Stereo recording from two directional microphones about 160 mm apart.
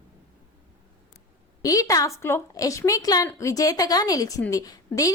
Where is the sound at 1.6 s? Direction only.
20° left (ahead or behind).